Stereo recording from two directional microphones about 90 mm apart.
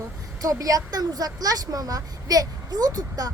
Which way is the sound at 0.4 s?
40° right (ahead or behind).